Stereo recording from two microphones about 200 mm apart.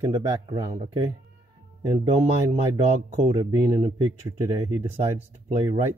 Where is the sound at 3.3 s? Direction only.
20° right (ahead or behind).